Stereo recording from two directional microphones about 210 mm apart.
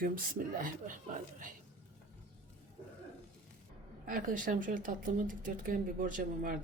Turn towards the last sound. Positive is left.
turn(degrees=-40)  # may be behind; listen again after turning